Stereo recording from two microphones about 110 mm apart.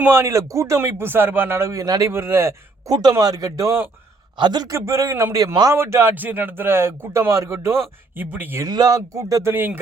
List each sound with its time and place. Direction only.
0.1 s speech: 25° right (ahead or behind)
2.9 s speech: 35° right (ahead or behind)
4.4 s speech: 40° right (ahead or behind)
4.7 s speech: 25° right (ahead or behind)
5.7 s speech: 20° right (ahead or behind)
8.6 s speech: 35° right (ahead or behind)